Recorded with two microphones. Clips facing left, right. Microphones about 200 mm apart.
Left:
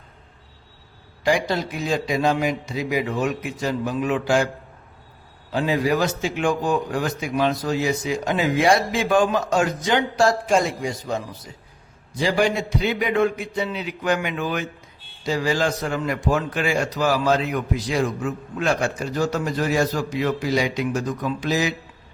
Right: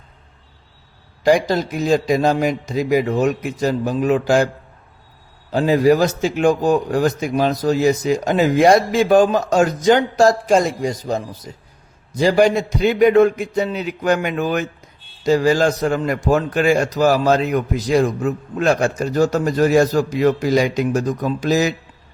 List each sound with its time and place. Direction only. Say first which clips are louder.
1.2 s a man's voice: right 6 dB; 40° right (ahead or behind)
5.5 s a man's voice: right 7 dB; 40° right (ahead or behind)